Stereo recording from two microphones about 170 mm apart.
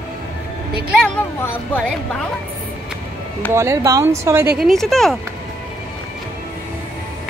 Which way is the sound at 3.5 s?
15° right (ahead or behind).